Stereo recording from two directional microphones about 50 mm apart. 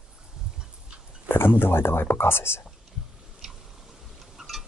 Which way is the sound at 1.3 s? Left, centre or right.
Left.